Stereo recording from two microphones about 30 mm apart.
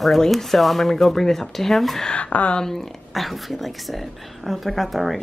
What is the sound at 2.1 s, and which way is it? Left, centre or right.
Speech, left.